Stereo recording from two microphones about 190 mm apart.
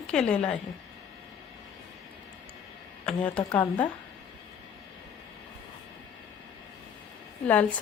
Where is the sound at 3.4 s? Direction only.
10° left (ahead or behind).